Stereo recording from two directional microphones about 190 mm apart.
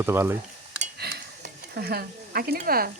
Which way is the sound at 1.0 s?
55° right (ahead or behind).